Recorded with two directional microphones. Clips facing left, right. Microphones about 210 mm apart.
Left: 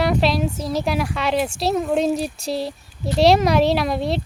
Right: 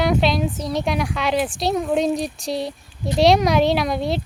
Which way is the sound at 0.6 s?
Centre (ahead or behind).